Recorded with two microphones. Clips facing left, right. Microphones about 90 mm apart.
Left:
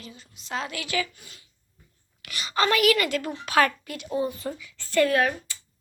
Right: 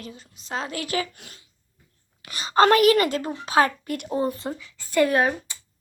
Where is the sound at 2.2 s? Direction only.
35° right (ahead or behind).